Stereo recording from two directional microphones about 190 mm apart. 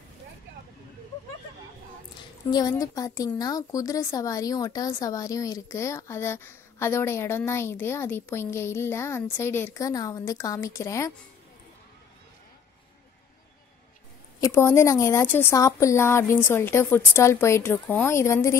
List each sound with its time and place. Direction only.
2.5 s a woman's voice: 20° left (ahead or behind)
14.4 s a woman's voice: 15° left (ahead or behind)